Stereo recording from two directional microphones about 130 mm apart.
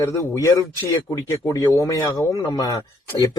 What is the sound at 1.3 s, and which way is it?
A man's voice, 25° left (ahead or behind).